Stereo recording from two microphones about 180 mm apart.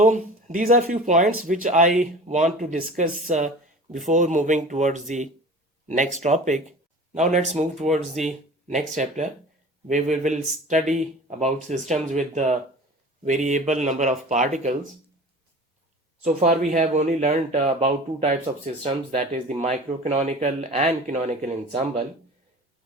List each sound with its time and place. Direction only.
0.0 s speech: 45° right (ahead or behind)
16.2 s speech: 45° right (ahead or behind)